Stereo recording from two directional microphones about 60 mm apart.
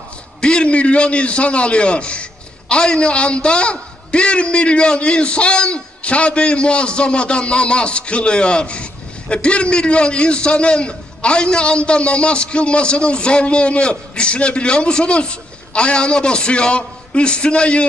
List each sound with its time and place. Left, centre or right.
0.4 s a man's voice: centre